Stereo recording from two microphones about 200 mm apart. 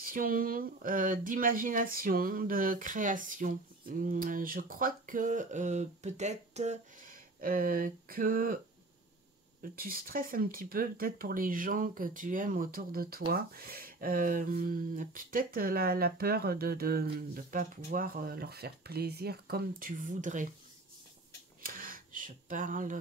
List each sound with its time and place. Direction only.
0.0 s speech: 45° right (ahead or behind)
9.6 s speech: 45° right (ahead or behind)
21.6 s a sound: 45° right (ahead or behind)